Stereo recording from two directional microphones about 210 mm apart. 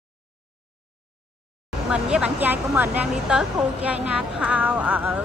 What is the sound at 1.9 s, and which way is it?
A woman's voice, 5° right (ahead or behind).